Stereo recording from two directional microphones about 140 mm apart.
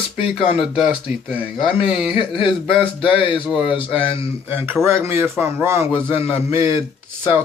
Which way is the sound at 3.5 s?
5° right (ahead or behind).